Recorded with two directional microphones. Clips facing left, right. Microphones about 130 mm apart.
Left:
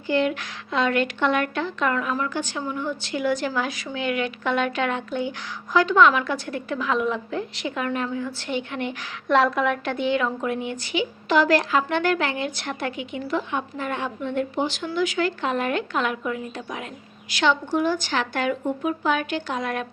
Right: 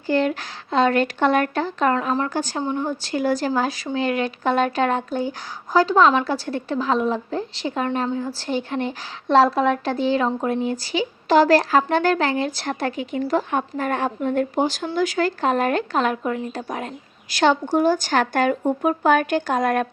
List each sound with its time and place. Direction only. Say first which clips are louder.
0.1 s a woman's voice: right 2 dB; 35° right (ahead or behind)